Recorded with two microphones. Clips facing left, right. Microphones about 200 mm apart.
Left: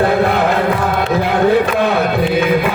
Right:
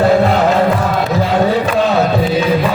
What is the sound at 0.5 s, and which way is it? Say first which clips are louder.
Music: right 2 dB; 55° left (ahead or behind).